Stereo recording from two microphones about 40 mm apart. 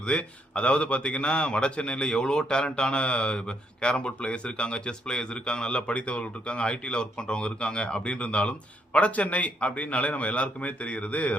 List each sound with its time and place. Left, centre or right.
0.0 s a man's voice: left